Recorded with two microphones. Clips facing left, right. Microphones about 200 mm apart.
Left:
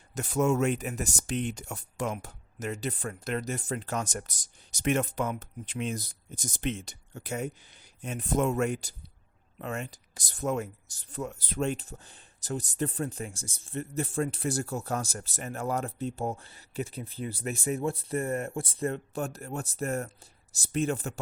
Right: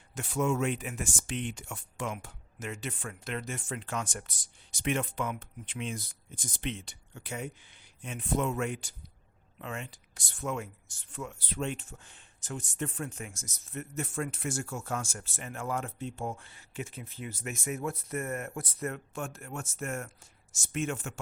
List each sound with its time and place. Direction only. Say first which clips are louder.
0.1 s speech: left 4 dB; 40° left (ahead or behind)